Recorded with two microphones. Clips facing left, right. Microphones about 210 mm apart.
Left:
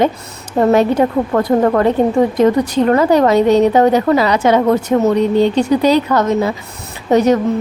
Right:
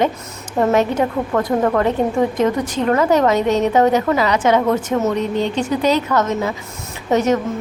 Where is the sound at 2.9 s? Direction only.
35° left (ahead or behind).